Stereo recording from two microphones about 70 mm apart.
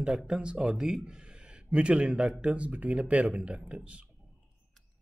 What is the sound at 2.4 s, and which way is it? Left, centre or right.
Speech, centre.